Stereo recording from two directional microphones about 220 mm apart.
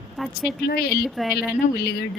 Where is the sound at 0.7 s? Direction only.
45° left (ahead or behind).